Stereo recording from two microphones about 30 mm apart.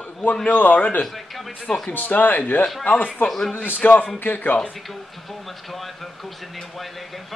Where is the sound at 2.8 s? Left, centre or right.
Left.